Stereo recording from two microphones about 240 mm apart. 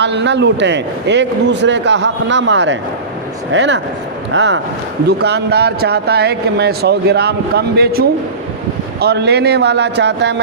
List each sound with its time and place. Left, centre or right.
0.0 s speech: right